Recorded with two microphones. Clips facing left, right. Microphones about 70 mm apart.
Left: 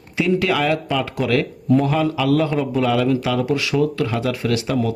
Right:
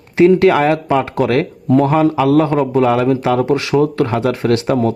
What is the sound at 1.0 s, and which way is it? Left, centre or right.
Speech, right.